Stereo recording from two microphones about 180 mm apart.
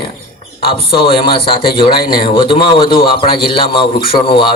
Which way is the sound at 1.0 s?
30° left (ahead or behind).